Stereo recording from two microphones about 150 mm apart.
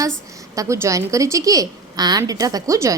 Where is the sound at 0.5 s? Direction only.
20° right (ahead or behind).